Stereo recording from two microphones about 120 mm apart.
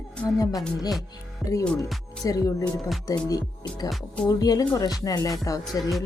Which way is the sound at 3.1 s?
30° left (ahead or behind).